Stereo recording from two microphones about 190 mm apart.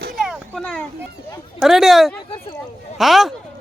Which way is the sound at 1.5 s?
Centre (ahead or behind).